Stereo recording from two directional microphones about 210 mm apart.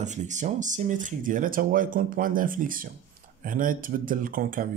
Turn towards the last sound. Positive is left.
turn(degrees=-40)  # may be behind; listen again after turning